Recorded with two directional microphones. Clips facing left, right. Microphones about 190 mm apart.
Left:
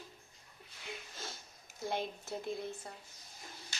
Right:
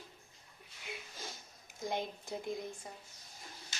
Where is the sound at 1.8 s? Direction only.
15° right (ahead or behind).